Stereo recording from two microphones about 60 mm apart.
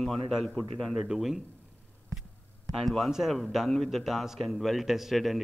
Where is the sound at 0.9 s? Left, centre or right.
Centre.